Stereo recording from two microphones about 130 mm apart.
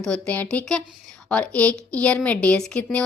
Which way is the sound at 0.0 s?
10° left (ahead or behind).